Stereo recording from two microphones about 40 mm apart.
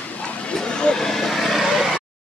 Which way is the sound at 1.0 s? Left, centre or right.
Centre.